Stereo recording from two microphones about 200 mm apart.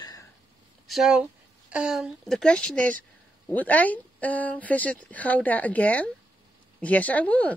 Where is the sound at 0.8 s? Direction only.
Centre (ahead or behind).